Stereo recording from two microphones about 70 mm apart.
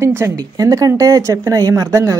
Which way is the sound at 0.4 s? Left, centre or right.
Right.